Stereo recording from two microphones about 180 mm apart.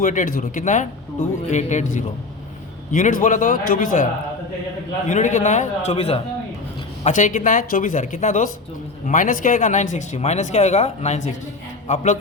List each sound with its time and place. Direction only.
0.0 s speech: 45° left (ahead or behind)
7.0 s speech: 45° left (ahead or behind)